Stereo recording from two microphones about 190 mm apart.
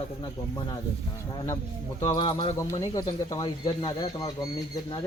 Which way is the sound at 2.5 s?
15° left (ahead or behind).